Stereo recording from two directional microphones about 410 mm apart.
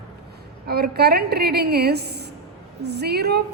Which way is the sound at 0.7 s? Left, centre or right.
Right.